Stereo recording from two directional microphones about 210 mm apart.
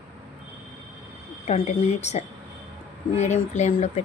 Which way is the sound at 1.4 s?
30° left (ahead or behind).